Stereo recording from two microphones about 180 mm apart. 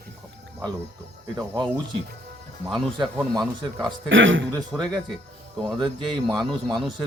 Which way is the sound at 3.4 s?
Centre (ahead or behind).